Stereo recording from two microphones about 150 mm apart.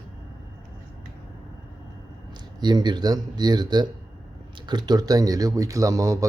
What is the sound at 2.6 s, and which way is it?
A man's voice, 30° right (ahead or behind).